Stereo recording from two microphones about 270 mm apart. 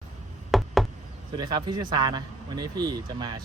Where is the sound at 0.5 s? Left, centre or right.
Centre.